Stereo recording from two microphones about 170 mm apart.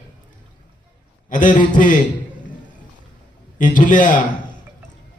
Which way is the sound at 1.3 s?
50° left (ahead or behind).